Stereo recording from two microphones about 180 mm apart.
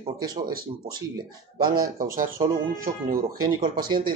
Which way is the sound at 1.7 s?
55° right (ahead or behind).